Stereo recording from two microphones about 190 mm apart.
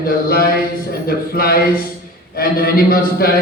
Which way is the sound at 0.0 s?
50° left (ahead or behind).